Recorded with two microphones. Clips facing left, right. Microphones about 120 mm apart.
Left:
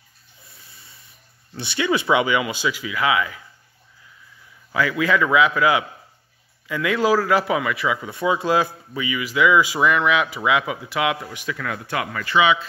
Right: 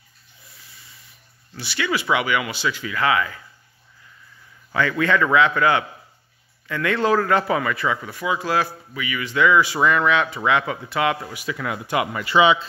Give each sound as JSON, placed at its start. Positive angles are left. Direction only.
{"t": 1.5, "sound": "speech", "side_deg": 25}
{"t": 4.7, "sound": "a man's voice", "side_deg": 5}
{"t": 8.0, "sound": "speech", "side_deg": 25}
{"t": 9.2, "sound": "a man's voice", "side_deg": 10}
{"t": 11.5, "sound": "speech", "side_deg": -15}
{"t": 12.4, "sound": "speech", "side_deg": -30}